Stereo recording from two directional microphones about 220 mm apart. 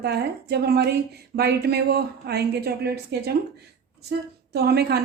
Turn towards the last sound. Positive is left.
turn(degrees=-45)  # may be behind; listen again after turning